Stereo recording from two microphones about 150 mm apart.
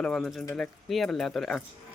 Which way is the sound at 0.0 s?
5° left (ahead or behind).